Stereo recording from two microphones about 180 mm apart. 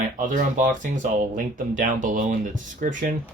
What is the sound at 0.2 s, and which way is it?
Speech, 45° right (ahead or behind).